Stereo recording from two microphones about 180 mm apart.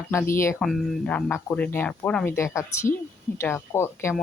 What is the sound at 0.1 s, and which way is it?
Speech, 15° left (ahead or behind).